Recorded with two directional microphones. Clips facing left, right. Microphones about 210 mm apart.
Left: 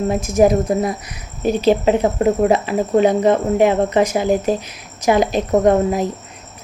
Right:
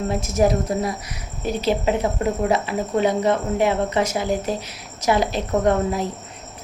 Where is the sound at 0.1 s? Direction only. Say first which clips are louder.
Left 5 dB; 15° left (ahead or behind).